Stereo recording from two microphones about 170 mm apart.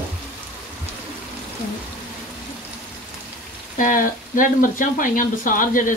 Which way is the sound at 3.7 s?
50° left (ahead or behind).